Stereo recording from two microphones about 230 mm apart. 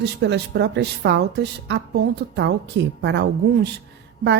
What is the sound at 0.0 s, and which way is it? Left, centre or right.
A woman's voice, right.